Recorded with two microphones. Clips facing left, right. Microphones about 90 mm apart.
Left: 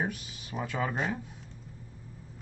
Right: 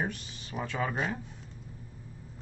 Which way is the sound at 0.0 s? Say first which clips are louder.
Left 1 dB; 10° left (ahead or behind).